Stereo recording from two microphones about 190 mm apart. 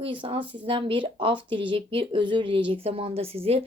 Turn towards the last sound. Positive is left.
turn(degrees=-30)  # may be behind; listen again after turning